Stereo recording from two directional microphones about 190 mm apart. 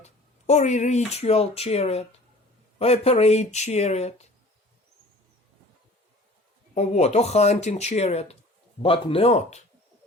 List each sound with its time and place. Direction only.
0.0 s speech: 35° left (ahead or behind)
6.7 s speech: 35° left (ahead or behind)